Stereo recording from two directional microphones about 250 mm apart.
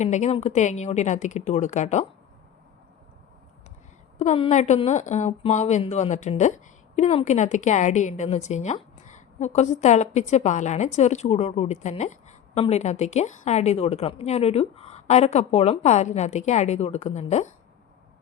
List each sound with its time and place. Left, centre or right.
0.0 s a woman's voice: left
4.2 s a woman's voice: left